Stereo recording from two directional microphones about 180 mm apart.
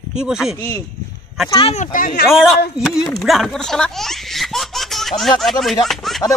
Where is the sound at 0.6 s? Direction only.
10° left (ahead or behind).